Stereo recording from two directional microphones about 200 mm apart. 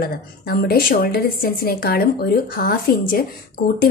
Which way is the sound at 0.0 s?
50° left (ahead or behind).